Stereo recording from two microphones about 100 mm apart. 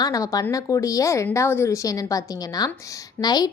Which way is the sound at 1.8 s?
35° left (ahead or behind).